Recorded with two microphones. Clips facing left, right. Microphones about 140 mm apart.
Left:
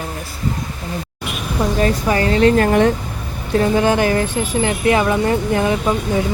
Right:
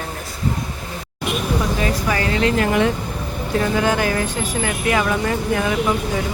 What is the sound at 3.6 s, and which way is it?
Speech, 25° left (ahead or behind).